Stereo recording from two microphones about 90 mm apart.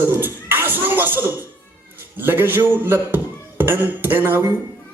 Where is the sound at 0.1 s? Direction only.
25° right (ahead or behind).